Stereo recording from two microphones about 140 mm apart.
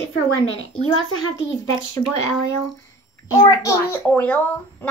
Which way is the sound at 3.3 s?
25° left (ahead or behind).